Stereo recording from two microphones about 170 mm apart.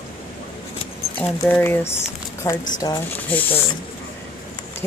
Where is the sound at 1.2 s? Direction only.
10° left (ahead or behind).